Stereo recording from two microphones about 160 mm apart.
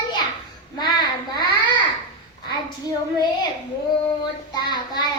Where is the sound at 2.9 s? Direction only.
25° left (ahead or behind).